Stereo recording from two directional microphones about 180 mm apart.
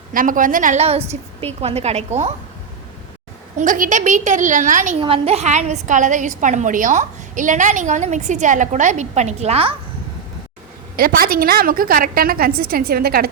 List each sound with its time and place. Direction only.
0.1 s a woman's voice: 50° right (ahead or behind)
3.6 s a woman's voice: 45° right (ahead or behind)
4.9 s a woman's voice: 30° right (ahead or behind)
10.9 s a woman's voice: 55° right (ahead or behind)